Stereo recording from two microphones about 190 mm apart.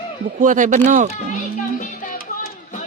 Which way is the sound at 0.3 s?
45° right (ahead or behind).